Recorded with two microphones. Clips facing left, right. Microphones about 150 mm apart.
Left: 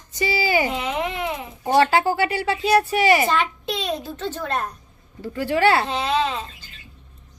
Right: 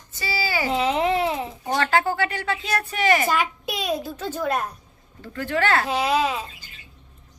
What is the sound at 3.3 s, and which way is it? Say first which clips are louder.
A child's voice: left 1 dB; 10° right (ahead or behind).